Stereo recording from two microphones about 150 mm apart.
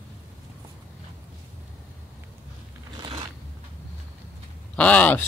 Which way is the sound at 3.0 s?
30° right (ahead or behind).